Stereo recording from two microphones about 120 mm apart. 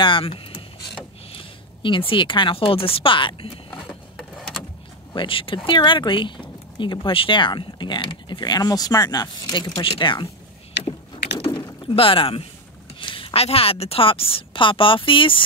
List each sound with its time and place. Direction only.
0.0 s speech: 45° left (ahead or behind)
4.2 s vehicle: 5° left (ahead or behind)
5.1 s a woman's voice: 45° left (ahead or behind)
11.3 s a sound: 50° left (ahead or behind)
11.8 s a woman's voice: 50° left (ahead or behind)